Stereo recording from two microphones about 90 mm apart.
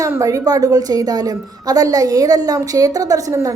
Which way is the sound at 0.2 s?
40° right (ahead or behind).